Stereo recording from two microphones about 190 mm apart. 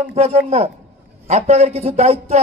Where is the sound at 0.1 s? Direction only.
35° right (ahead or behind).